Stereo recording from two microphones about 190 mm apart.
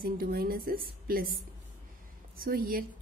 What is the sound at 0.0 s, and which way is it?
Speech, 50° right (ahead or behind).